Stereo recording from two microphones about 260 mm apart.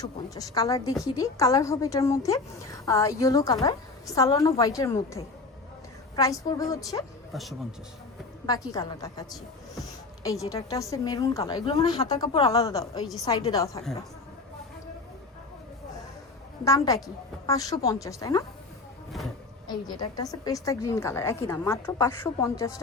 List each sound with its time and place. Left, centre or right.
0.0 s a woman's voice: centre
8.4 s a woman's voice: centre
10.5 s a woman's voice: centre
16.6 s a woman's voice: centre
19.6 s a woman's voice: centre